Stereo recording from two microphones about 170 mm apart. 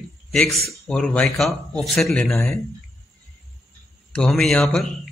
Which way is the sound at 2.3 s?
15° left (ahead or behind).